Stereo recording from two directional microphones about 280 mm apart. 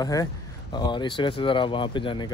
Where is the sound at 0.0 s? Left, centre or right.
Centre.